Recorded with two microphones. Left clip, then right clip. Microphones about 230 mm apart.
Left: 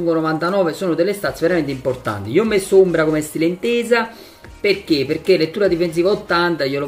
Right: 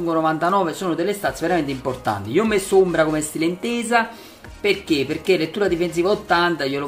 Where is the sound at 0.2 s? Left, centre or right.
Centre.